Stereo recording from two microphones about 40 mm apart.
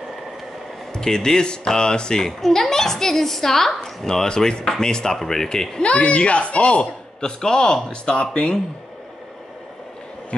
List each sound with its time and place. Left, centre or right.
0.9 s a child's voice: centre
5.8 s a man's voice: left